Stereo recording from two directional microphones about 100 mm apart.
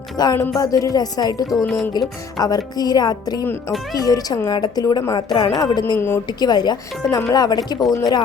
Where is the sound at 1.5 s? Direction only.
Centre (ahead or behind).